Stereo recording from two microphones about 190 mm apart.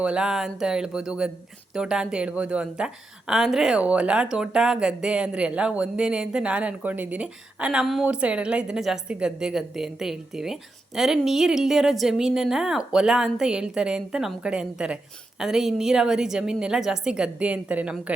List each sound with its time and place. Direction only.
0.0 s a woman's voice: 5° right (ahead or behind)